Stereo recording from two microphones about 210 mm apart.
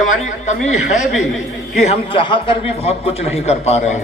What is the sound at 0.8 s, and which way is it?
Speech, 5° right (ahead or behind).